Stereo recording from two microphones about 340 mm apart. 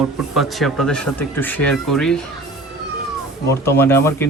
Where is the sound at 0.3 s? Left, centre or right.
Centre.